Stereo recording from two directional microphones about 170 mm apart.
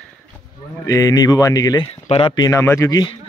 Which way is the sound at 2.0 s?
30° left (ahead or behind).